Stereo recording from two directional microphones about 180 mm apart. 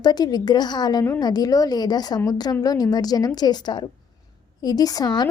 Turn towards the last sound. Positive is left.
turn(degrees=25)  # may be behind; listen again after turning